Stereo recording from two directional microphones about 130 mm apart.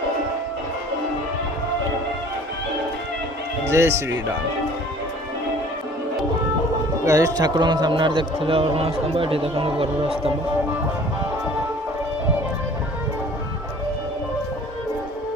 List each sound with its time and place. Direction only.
3.7 s speech: 20° right (ahead or behind)
7.0 s a man's voice: 25° right (ahead or behind); by 10.3 s 45° right (ahead or behind)